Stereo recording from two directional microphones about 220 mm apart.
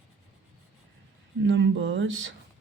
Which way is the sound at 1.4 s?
55° right (ahead or behind).